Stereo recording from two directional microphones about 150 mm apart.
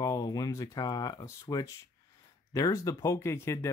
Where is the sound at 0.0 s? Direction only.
25° left (ahead or behind).